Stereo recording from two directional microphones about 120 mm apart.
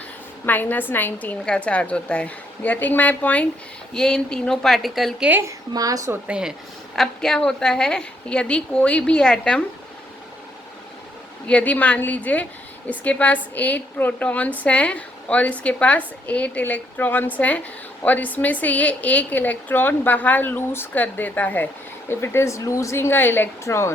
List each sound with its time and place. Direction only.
0.4 s a woman's voice: 15° left (ahead or behind)
5.3 s a woman's voice: 25° right (ahead or behind)
6.1 s speech: 10° right (ahead or behind)
6.9 s a woman's voice: 5° left (ahead or behind)
11.4 s a woman's voice: 10° left (ahead or behind)